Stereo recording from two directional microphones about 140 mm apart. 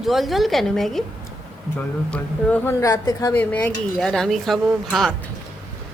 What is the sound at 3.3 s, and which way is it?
A woman's voice, 15° left (ahead or behind).